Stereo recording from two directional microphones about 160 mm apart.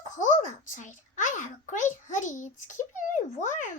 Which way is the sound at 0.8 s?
50° left (ahead or behind).